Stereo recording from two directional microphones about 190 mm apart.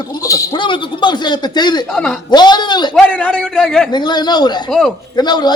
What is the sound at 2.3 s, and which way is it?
Speech, 20° left (ahead or behind).